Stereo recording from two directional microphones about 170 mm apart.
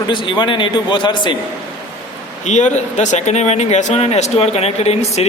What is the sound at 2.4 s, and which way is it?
Speech, 45° left (ahead or behind).